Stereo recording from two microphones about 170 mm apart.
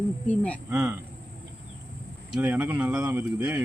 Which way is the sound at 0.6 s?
5° right (ahead or behind).